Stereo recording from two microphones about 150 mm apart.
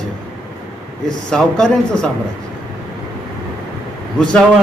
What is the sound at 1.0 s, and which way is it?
A man's voice, 5° left (ahead or behind).